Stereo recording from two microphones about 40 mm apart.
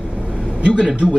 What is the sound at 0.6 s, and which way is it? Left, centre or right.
Speech, right.